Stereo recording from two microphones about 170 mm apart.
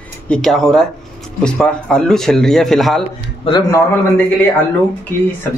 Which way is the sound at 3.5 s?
25° left (ahead or behind).